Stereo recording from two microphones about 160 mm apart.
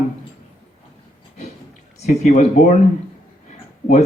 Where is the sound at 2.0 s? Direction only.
45° left (ahead or behind).